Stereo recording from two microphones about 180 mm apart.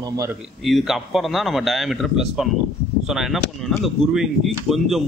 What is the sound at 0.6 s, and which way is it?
Speech, centre (ahead or behind).